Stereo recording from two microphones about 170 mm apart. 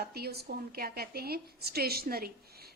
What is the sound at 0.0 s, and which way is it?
A woman's voice, 70° right (ahead or behind).